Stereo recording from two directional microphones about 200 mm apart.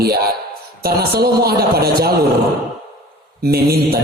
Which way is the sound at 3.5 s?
50° right (ahead or behind).